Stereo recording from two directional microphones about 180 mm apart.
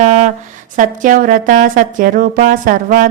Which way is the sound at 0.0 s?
40° right (ahead or behind).